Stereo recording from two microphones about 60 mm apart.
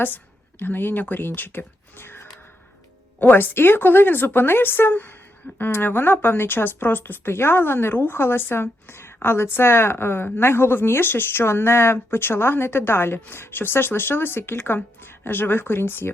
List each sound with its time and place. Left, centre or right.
0.6 s a woman's voice: left